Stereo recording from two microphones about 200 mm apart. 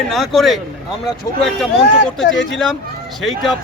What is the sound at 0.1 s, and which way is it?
Speech, centre (ahead or behind).